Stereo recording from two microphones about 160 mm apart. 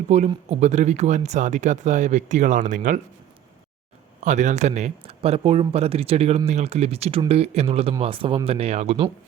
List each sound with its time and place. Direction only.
0.1 s speech: 40° right (ahead or behind)
4.2 s speech: 50° right (ahead or behind)